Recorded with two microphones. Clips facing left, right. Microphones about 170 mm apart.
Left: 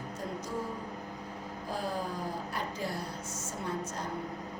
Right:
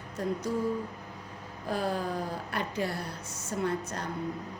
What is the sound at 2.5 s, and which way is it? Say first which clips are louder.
Speech: right 4 dB; 70° right (ahead or behind).